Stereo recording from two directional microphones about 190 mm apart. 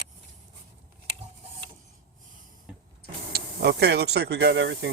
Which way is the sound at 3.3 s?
55° right (ahead or behind).